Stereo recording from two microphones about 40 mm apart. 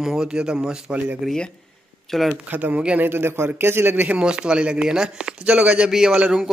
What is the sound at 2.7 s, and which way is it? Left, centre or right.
Speech, right.